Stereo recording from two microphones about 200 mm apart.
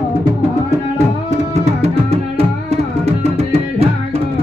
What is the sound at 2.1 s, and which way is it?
Music, 30° right (ahead or behind).